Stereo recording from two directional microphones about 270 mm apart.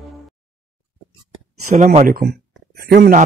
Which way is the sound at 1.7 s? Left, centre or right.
Right.